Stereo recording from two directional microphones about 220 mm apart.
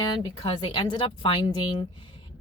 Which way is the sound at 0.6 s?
20° left (ahead or behind).